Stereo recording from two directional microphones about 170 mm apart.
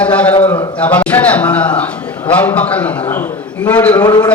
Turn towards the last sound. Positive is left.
turn(degrees=25)  # may be behind; listen again after turning